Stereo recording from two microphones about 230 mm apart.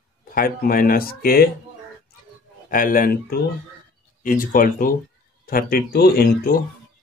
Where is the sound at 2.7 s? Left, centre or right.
Left.